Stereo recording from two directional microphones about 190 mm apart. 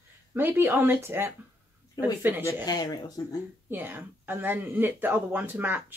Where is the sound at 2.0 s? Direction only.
20° left (ahead or behind).